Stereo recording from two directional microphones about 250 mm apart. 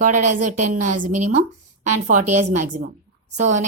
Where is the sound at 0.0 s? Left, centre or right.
Right.